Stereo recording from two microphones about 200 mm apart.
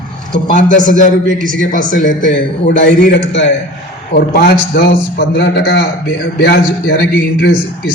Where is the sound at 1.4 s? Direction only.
40° right (ahead or behind).